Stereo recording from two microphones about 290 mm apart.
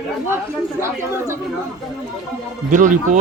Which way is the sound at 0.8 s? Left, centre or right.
Centre.